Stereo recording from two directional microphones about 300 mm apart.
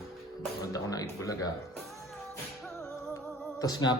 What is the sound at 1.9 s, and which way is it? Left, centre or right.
Music, centre.